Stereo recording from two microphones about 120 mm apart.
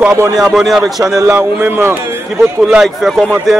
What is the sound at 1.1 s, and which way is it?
A man's voice, 25° right (ahead or behind).